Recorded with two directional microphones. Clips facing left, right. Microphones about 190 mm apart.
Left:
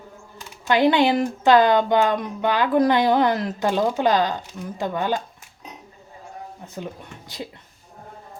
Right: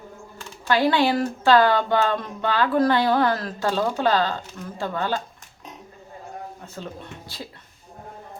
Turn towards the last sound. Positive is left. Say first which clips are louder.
# left 2 dB
turn(degrees=20)  # may be behind; listen again after turning